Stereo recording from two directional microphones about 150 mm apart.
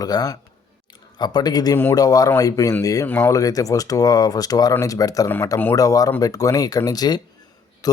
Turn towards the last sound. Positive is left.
turn(degrees=25)  # may be behind; listen again after turning